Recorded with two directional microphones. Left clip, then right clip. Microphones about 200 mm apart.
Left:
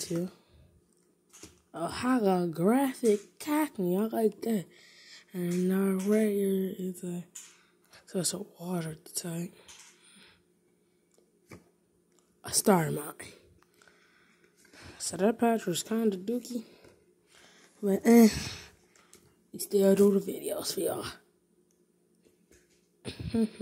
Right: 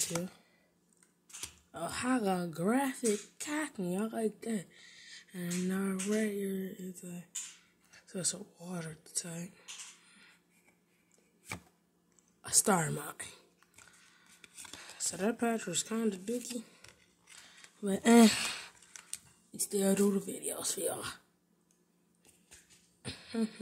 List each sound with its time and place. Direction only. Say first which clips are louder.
1.7 s a woman's voice: left 4 dB; centre (ahead or behind)
7.9 s whispering: left 5 dB; 5° left (ahead or behind)
12.4 s a woman's voice: left 4 dB; centre (ahead or behind)
14.8 s a woman's voice: left 7 dB; centre (ahead or behind)
17.5 s a sound: left 7 dB; 10° right (ahead or behind)
18.2 s sigh: left 2 dB; 30° right (ahead or behind)
19.5 s a woman's voice: left 8 dB; centre (ahead or behind)
23.0 s a sound: left 5 dB; 5° right (ahead or behind)